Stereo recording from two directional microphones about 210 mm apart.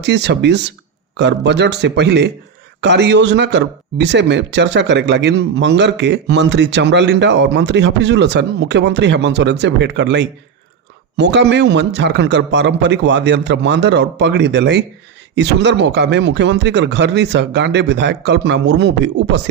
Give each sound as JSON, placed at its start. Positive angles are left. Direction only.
{"t": 0.0, "sound": "a man's voice", "side_deg": -55}